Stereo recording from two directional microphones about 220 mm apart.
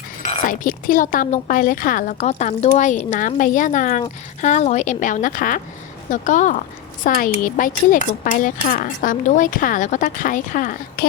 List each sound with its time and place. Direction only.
0.3 s speech: 30° left (ahead or behind)